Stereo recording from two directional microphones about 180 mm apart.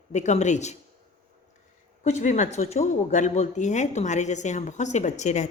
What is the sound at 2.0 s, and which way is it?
Speech, 40° left (ahead or behind).